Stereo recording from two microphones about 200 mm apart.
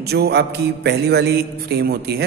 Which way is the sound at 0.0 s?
55° right (ahead or behind).